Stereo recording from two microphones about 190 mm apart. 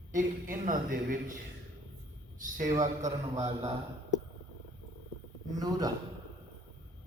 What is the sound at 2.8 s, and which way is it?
Speech, 40° right (ahead or behind).